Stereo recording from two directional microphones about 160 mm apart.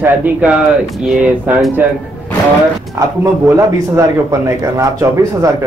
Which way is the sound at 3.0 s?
20° right (ahead or behind).